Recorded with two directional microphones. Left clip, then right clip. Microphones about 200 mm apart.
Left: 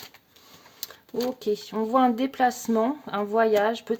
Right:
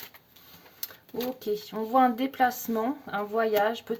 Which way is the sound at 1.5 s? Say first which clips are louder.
Left 4 dB; 35° left (ahead or behind).